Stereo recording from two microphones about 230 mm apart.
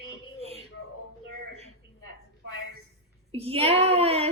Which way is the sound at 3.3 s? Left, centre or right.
Right.